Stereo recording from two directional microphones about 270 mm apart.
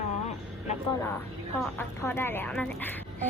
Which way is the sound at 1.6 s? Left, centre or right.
Centre.